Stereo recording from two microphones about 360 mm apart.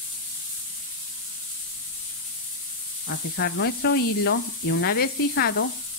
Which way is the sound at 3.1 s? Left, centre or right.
Left.